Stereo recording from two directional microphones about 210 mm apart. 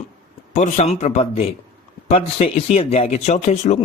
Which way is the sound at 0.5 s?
35° left (ahead or behind).